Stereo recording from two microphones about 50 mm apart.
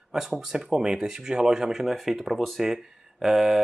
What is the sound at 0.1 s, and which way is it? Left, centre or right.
Speech, centre.